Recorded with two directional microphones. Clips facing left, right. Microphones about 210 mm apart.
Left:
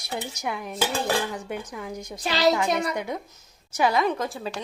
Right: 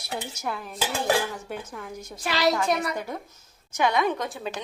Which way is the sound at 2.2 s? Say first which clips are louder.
Left 2 dB; 25° left (ahead or behind).